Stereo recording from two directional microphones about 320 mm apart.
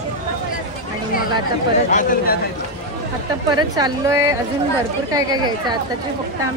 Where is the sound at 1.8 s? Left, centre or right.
Left.